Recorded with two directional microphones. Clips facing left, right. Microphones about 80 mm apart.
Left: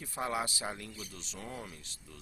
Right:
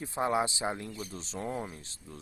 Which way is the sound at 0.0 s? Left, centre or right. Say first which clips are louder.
Right 6 dB; right.